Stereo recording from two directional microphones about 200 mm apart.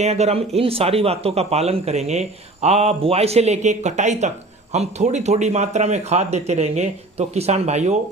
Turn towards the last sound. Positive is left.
turn(degrees=-35)  # may be behind; listen again after turning